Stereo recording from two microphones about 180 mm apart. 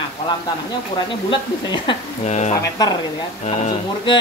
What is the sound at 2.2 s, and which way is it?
Speech, 40° left (ahead or behind).